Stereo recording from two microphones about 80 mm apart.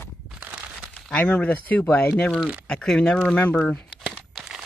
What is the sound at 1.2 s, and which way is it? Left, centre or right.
Speech, centre.